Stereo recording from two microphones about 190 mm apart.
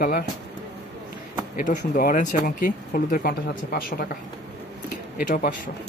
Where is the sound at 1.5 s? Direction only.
45° left (ahead or behind).